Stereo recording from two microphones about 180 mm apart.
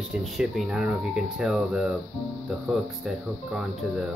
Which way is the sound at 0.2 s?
5° right (ahead or behind).